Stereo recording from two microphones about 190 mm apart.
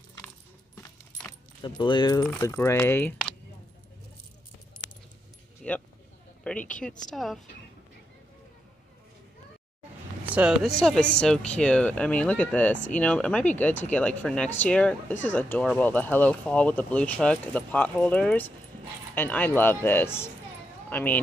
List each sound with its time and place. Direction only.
1.6 s speech: 25° left (ahead or behind)
5.6 s a sound: centre (ahead or behind)
6.4 s speech: 5° left (ahead or behind)
10.3 s speech: 5° right (ahead or behind)